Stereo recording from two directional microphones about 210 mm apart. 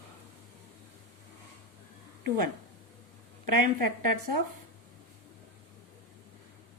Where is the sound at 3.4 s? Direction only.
40° right (ahead or behind).